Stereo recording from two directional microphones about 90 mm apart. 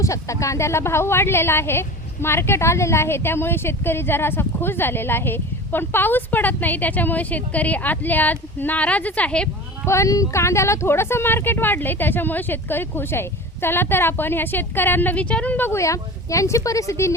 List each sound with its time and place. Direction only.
0.0 s a woman's voice: 35° left (ahead or behind); by 9.5 s 15° left (ahead or behind)
9.8 s a woman's voice: 35° left (ahead or behind)